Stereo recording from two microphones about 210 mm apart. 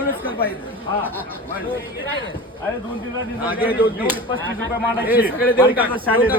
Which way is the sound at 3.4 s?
10° right (ahead or behind).